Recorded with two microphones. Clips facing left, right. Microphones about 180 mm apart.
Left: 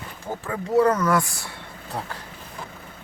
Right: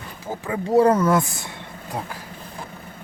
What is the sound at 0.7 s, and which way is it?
Speech, 30° right (ahead or behind).